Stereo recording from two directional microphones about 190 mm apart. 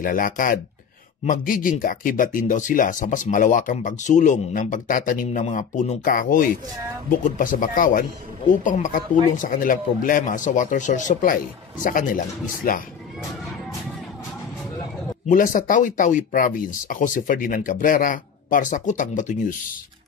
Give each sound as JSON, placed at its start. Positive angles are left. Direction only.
{"t": 0.0, "sound": "speech", "side_deg": 45}
{"t": 15.2, "sound": "speech", "side_deg": 45}